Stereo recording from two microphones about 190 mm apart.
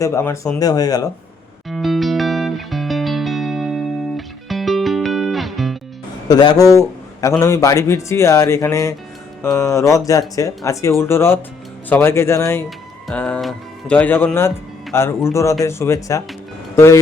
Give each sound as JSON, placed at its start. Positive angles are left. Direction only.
{"t": 0.0, "sound": "a man's voice", "side_deg": 15}
{"t": 1.7, "sound": "music", "side_deg": 0}
{"t": 6.2, "sound": "a man's voice", "side_deg": 20}